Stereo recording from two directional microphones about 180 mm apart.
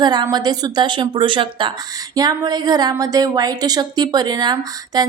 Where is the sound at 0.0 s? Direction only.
25° right (ahead or behind).